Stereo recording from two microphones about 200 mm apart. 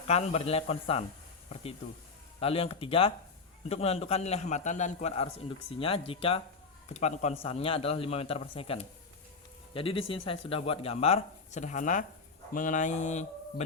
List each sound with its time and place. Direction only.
0.1 s a man's voice: 30° left (ahead or behind)
2.4 s a man's voice: 30° left (ahead or behind)